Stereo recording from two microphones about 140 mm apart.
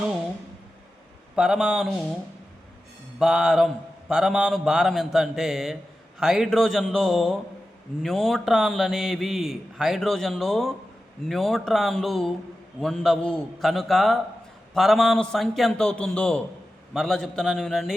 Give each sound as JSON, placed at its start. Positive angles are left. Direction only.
{"t": 1.4, "sound": "a man's voice", "side_deg": -5}
{"t": 3.2, "sound": "a man's voice", "side_deg": -5}